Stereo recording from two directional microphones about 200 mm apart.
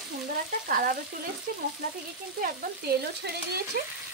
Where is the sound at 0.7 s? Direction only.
45° right (ahead or behind).